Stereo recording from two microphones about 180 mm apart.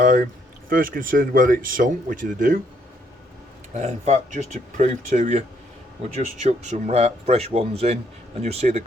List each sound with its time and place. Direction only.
0.0 s speech: 45° right (ahead or behind)
3.8 s speech: 35° right (ahead or behind)